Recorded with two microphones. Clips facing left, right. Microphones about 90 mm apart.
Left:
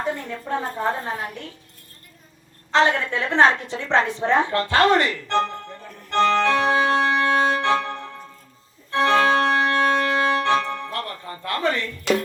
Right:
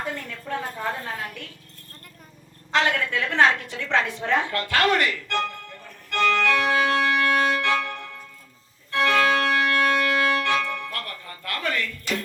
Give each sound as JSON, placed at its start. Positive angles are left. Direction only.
{"t": 0.0, "sound": "a woman's voice", "side_deg": 25}
{"t": 2.7, "sound": "a sound", "side_deg": 30}
{"t": 8.9, "sound": "organ", "side_deg": 30}